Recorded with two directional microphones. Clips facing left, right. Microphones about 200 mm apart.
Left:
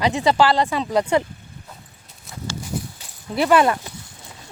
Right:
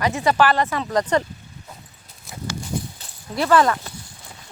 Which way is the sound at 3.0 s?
15° left (ahead or behind).